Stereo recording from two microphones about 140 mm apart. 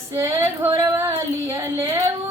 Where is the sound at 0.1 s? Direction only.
20° right (ahead or behind).